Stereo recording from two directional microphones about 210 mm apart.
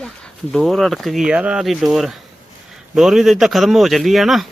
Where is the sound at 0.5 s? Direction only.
Centre (ahead or behind).